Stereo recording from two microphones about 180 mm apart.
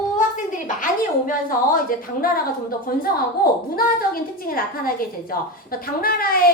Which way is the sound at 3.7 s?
55° left (ahead or behind).